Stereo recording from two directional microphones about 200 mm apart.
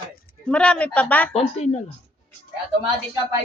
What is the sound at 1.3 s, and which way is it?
Speech, 30° left (ahead or behind).